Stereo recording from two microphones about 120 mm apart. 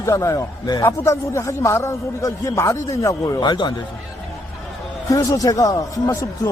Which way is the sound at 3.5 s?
40° left (ahead or behind).